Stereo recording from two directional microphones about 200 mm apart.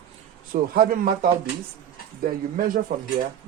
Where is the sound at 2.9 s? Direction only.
45° right (ahead or behind).